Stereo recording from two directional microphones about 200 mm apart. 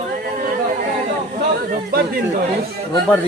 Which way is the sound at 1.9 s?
50° right (ahead or behind).